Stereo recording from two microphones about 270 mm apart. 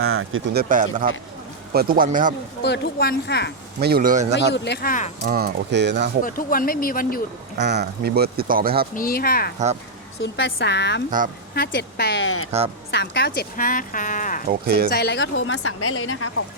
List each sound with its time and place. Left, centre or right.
0.0 s speech: right
0.6 s speech: right
2.6 s speech: left
3.8 s speech: right
4.4 s speech: left
5.2 s speech: right
6.2 s speech: left
7.6 s speech: right
9.0 s speech: left
12.5 s speech: right
12.9 s speech: left
14.4 s speech: right
14.8 s speech: left